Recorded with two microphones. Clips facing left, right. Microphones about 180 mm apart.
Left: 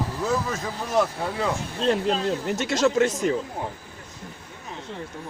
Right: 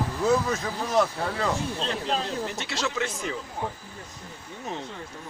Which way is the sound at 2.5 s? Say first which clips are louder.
Left 9 dB; 45° left (ahead or behind).